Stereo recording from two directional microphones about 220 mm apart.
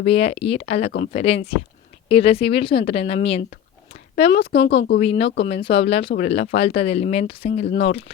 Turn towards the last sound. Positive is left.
turn(degrees=30)  # may be behind; listen again after turning